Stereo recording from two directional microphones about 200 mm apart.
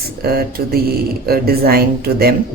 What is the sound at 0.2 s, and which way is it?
Speech, 50° right (ahead or behind).